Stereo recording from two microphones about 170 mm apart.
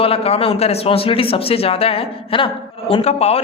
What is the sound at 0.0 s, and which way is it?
A man's voice, 35° left (ahead or behind).